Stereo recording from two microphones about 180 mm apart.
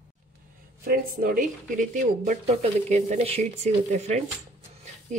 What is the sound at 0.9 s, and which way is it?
Speech, 50° right (ahead or behind).